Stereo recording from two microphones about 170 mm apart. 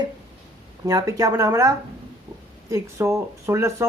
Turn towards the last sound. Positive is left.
turn(degrees=-15)  # may be behind; listen again after turning